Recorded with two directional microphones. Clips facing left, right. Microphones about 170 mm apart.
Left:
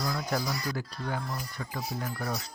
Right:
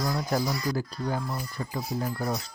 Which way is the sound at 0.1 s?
35° right (ahead or behind).